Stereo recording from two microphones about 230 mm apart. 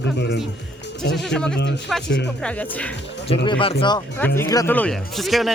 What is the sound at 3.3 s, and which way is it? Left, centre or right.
Speech, left.